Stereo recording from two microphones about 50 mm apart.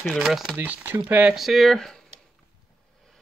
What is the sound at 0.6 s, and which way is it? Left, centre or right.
Speech, right.